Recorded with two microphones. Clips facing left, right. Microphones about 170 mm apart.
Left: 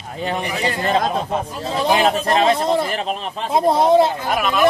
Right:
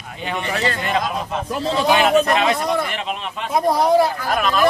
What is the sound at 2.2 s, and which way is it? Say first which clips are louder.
A man's voice: left 2 dB; 30° left (ahead or behind).